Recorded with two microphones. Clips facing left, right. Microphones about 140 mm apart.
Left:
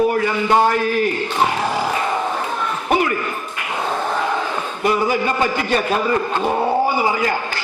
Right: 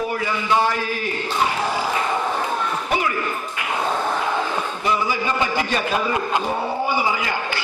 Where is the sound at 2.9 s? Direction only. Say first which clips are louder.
Left 6 dB; 50° left (ahead or behind).